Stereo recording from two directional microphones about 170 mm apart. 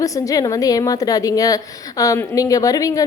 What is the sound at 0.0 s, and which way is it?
A woman's voice, 20° left (ahead or behind).